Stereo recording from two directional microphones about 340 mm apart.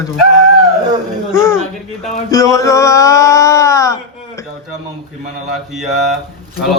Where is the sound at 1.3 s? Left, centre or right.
Centre.